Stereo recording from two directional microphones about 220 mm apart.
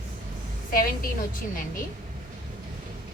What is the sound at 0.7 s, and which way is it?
Speech, 40° left (ahead or behind).